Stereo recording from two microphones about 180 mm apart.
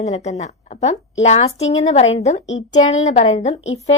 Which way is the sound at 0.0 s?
40° left (ahead or behind).